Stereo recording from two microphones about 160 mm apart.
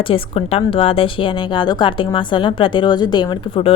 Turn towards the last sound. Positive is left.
turn(degrees=30)  # may be behind; listen again after turning